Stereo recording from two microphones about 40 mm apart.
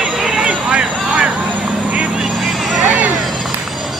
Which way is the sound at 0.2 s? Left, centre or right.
Centre.